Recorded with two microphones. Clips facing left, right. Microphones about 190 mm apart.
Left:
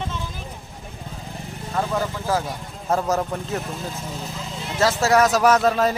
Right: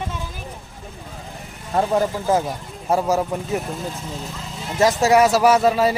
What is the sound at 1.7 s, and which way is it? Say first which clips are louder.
Speech: right 5 dB; 30° right (ahead or behind).